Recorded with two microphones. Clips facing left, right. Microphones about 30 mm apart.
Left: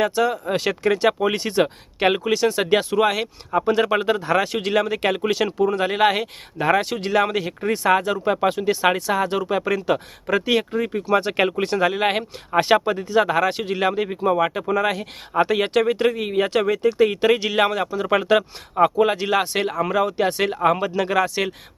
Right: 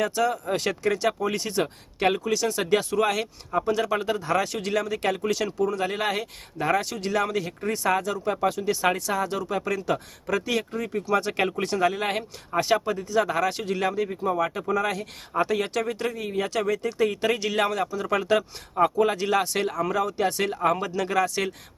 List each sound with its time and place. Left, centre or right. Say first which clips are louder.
0.0 s speech: left 4 dB; left
12.5 s speech: left 6 dB; left